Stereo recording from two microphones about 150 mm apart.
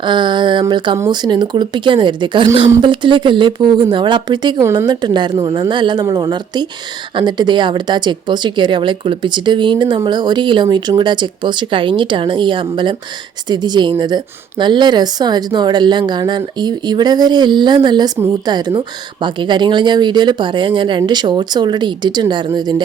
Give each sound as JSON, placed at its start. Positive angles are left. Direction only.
{"t": 0.0, "sound": "speech", "side_deg": -30}
{"t": 4.6, "sound": "speech", "side_deg": -20}
{"t": 4.9, "sound": "speech", "side_deg": -30}